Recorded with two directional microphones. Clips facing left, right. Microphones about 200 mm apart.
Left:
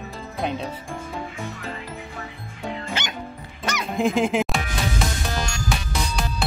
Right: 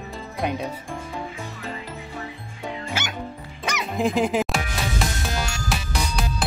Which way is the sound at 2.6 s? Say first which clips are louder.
Left 1 dB; 5° right (ahead or behind).